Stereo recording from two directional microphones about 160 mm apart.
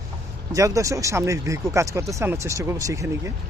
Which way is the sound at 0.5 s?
20° right (ahead or behind).